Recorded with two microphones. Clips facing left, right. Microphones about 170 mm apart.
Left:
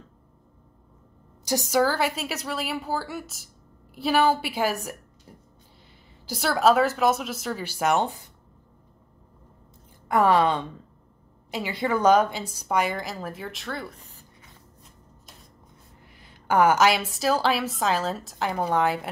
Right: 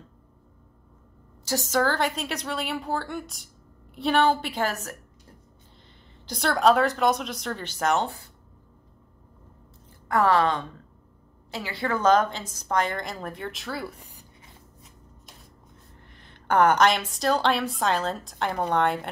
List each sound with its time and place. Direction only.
1.4 s a woman's voice: 15° left (ahead or behind)
6.2 s a woman's voice: 5° left (ahead or behind)
10.0 s a woman's voice: 15° left (ahead or behind); by 14.2 s 10° right (ahead or behind)
16.0 s a sound: 10° left (ahead or behind)
17.1 s a woman's voice: 5° left (ahead or behind)